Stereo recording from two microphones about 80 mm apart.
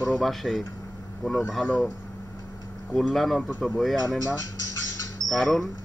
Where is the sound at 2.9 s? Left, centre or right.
Centre.